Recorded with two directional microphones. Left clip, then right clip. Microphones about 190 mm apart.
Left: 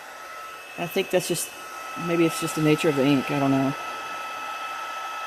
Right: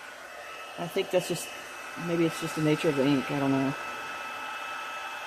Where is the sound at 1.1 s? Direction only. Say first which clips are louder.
Left 4 dB; 40° left (ahead or behind).